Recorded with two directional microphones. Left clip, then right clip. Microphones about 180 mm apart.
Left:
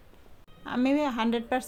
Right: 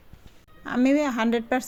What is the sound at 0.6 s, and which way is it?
A woman's voice, 25° right (ahead or behind).